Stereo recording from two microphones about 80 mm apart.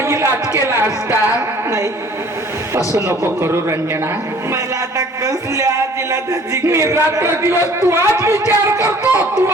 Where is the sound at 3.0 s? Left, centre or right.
Right.